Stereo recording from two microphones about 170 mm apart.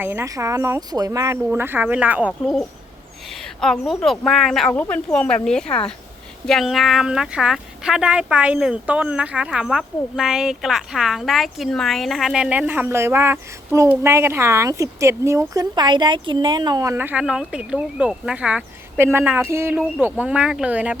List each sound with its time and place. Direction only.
0.0 s speech: 15° right (ahead or behind)